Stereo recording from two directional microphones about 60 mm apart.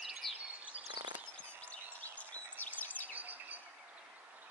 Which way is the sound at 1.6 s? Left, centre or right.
Left.